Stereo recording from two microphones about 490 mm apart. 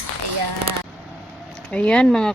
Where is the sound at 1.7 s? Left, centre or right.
Centre.